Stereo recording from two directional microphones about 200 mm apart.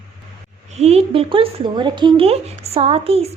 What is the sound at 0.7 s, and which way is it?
Speech, 30° right (ahead or behind).